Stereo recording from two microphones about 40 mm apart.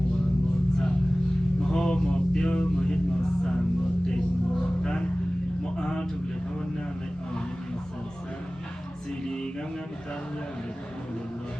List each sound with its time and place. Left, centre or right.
1.7 s music: centre
4.8 s music: left
5.7 s a sound: left